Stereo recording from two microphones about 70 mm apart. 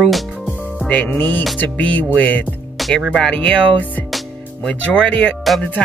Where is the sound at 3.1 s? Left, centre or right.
Centre.